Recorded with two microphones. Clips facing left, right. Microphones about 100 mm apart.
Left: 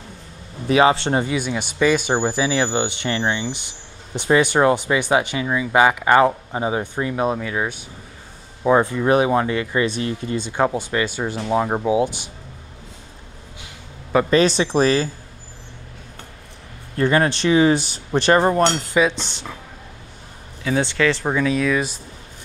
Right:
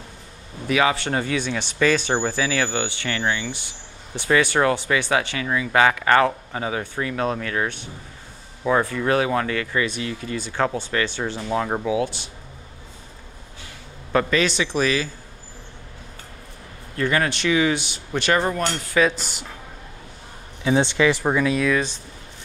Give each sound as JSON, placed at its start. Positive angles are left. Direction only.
{"t": 0.7, "sound": "speech", "side_deg": 30}
{"t": 1.3, "sound": "speech", "side_deg": 10}
{"t": 8.6, "sound": "speech", "side_deg": 20}
{"t": 14.3, "sound": "speech", "side_deg": 35}
{"t": 16.9, "sound": "speech", "side_deg": 30}
{"t": 19.0, "sound": "speech", "side_deg": -5}
{"t": 20.6, "sound": "speech", "side_deg": -20}